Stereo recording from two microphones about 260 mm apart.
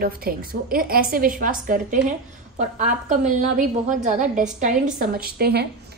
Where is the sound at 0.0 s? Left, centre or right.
Right.